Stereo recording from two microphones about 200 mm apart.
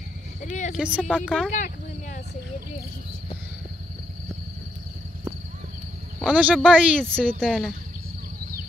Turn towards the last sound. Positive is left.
turn(degrees=5)  # may be behind; listen again after turning